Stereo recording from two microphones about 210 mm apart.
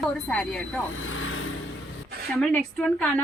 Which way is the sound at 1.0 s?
70° left (ahead or behind).